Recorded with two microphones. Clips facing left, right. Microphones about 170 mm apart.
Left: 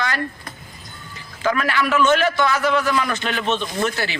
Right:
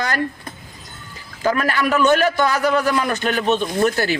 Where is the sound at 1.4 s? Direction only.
40° right (ahead or behind).